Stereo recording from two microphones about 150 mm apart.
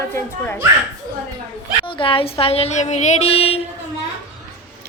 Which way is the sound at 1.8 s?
35° left (ahead or behind).